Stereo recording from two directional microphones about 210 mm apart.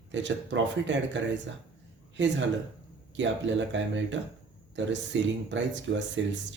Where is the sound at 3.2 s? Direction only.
60° right (ahead or behind).